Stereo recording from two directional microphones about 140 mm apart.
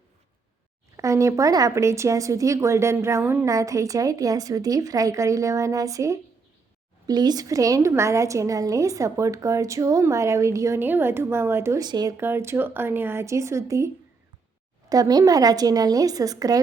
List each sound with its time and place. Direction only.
0.9 s a woman's voice: 20° right (ahead or behind)